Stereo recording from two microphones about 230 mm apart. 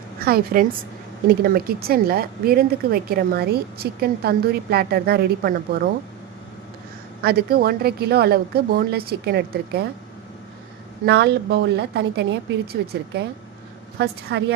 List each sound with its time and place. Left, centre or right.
0.2 s a woman's voice: right
7.2 s a woman's voice: right
11.0 s a woman's voice: right
14.0 s a woman's voice: right